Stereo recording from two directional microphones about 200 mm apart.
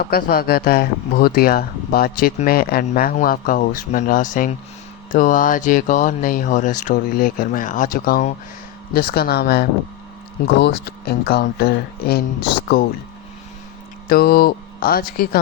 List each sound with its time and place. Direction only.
0.0 s speech: 50° left (ahead or behind)
14.1 s speech: 50° left (ahead or behind)